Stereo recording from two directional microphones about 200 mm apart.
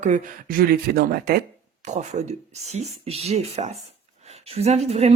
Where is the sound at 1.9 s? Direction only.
35° right (ahead or behind).